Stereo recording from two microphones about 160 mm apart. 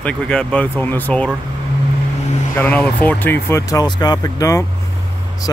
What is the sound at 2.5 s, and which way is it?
Speech, 10° left (ahead or behind).